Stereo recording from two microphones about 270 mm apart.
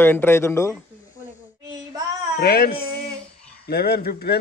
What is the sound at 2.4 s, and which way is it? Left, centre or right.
Speech, left.